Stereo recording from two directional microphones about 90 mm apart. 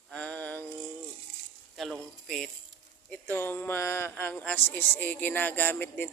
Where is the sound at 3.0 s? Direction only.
20° left (ahead or behind).